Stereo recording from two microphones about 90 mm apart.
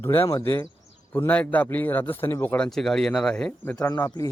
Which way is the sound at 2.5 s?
10° left (ahead or behind).